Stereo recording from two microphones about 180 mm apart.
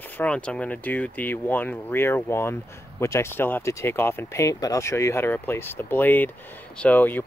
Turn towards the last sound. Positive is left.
turn(degrees=10)  # may be behind; listen again after turning